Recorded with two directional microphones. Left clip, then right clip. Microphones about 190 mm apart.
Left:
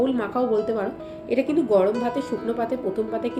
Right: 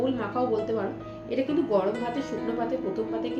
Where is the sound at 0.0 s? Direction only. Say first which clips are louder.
Left 4 dB; 45° left (ahead or behind).